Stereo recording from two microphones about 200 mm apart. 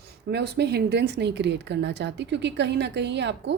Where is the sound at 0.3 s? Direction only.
55° right (ahead or behind).